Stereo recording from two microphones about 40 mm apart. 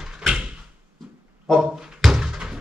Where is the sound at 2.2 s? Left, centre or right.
Centre.